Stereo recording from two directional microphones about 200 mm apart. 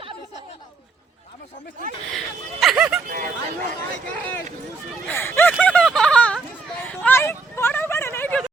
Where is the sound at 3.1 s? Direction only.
45° right (ahead or behind).